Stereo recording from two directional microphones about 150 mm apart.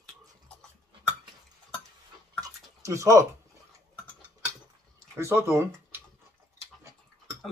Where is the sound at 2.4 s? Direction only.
20° right (ahead or behind).